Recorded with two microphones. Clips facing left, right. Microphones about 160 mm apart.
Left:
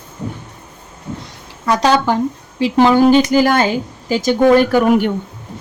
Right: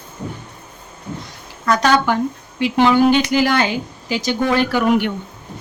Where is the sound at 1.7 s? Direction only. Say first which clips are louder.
Left 2 dB; 30° left (ahead or behind).